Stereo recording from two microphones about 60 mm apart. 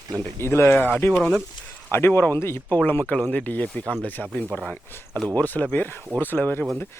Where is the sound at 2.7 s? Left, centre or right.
Left.